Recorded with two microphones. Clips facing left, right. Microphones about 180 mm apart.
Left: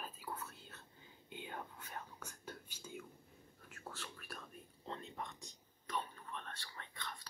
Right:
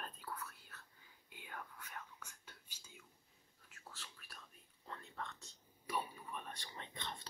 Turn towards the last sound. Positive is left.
turn(degrees=-25)  # may be behind; listen again after turning